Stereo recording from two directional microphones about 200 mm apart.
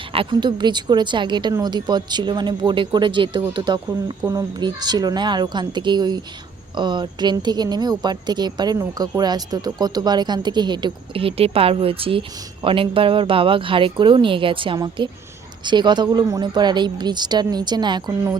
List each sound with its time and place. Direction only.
0.1 s a woman's voice: 25° right (ahead or behind)